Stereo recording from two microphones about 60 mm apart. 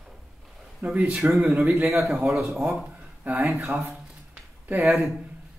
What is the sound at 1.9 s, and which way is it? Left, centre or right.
Speech, right.